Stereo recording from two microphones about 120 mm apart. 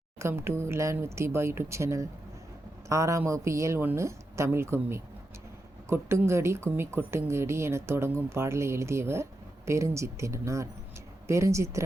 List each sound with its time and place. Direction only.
0.2 s speech: 20° right (ahead or behind)